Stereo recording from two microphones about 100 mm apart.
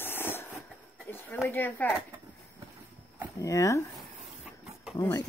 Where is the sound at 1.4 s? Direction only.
20° left (ahead or behind).